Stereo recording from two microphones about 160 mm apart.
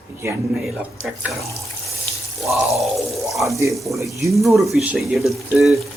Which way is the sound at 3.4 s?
20° right (ahead or behind).